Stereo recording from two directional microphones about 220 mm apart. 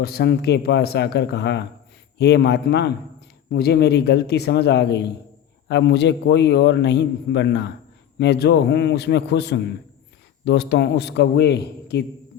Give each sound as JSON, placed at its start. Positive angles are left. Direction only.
{"t": 0.0, "sound": "a man's voice", "side_deg": 45}